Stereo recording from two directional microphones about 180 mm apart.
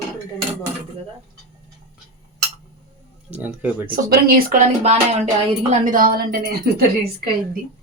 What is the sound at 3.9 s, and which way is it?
Speech, 55° right (ahead or behind).